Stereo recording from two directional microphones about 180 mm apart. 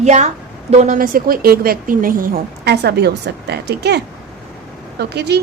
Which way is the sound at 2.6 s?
65° right (ahead or behind).